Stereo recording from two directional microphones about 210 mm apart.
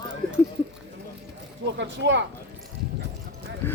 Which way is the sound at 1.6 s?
60° right (ahead or behind).